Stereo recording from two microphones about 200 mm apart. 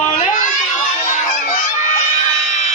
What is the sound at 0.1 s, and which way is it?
Crowd, 40° left (ahead or behind).